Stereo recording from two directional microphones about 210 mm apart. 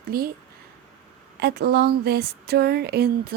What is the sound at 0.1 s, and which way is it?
Speech, 45° right (ahead or behind).